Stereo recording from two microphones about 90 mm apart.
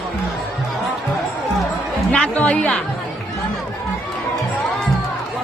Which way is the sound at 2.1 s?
15° left (ahead or behind).